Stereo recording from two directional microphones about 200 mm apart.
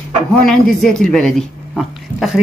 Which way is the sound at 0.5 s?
5° left (ahead or behind).